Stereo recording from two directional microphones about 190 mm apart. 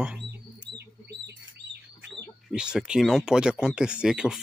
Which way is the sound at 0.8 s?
60° right (ahead or behind).